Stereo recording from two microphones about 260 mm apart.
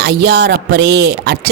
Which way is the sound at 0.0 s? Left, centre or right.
Right.